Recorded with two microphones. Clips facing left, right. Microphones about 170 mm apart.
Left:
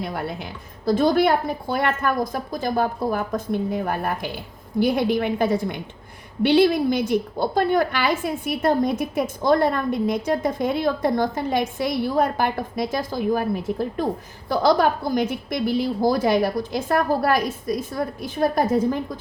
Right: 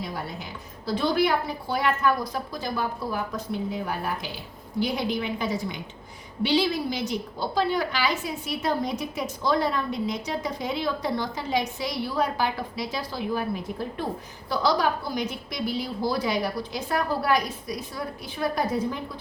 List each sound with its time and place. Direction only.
0.0 s a woman's voice: 60° left (ahead or behind)
0.9 s a woman's voice: 50° left (ahead or behind)